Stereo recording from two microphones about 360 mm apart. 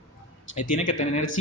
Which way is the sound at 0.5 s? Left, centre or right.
Left.